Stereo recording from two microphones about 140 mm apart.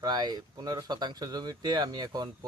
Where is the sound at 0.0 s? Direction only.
30° right (ahead or behind).